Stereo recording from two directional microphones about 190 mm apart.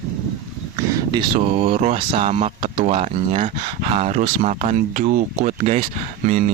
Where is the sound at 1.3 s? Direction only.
30° right (ahead or behind).